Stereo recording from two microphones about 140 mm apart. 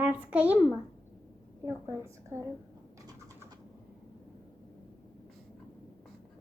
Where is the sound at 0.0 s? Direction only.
10° right (ahead or behind).